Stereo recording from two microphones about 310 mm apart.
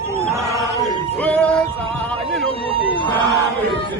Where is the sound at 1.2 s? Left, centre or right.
Centre.